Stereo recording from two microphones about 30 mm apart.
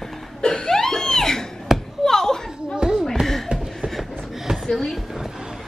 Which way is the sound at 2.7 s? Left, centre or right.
Right.